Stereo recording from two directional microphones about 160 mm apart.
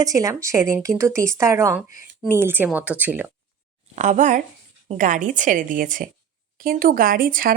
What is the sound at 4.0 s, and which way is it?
A woman's voice, 50° right (ahead or behind).